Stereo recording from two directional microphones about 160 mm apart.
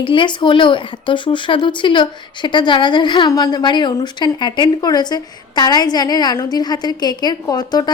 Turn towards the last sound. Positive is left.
turn(degrees=25)  # may be behind; listen again after turning